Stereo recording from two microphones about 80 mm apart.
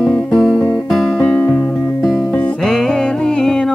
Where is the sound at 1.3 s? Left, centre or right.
Left.